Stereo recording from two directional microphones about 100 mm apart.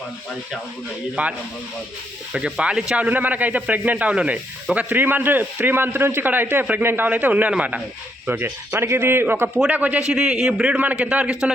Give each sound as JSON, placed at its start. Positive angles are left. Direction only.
{"t": 1.2, "sound": "speech", "side_deg": -15}
{"t": 10.1, "sound": "speech", "side_deg": -5}